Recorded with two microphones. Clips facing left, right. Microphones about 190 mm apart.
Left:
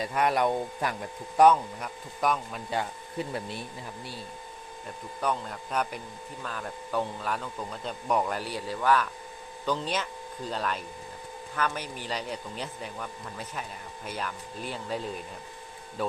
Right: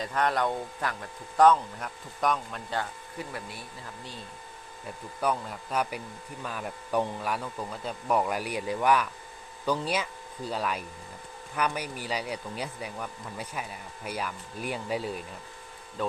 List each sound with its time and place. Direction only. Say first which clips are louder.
0.0 s speech: left 2 dB; 10° left (ahead or behind)
1.8 s speech: even; 5° left (ahead or behind)
3.2 s speech: left 5 dB; 25° left (ahead or behind)
5.2 s speech: right 1 dB; 5° right (ahead or behind)
16.0 s speech: even; 5° left (ahead or behind)